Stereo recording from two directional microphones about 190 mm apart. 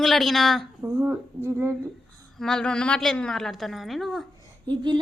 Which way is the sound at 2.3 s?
5° left (ahead or behind).